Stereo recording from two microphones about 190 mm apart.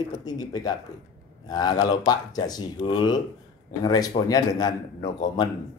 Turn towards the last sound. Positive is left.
turn(degrees=20)  # may be behind; listen again after turning